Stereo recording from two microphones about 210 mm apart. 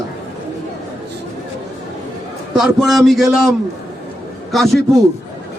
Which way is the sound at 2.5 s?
Centre (ahead or behind).